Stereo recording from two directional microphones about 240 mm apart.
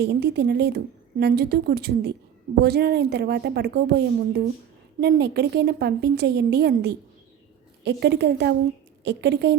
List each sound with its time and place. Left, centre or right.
0.0 s a woman's voice: right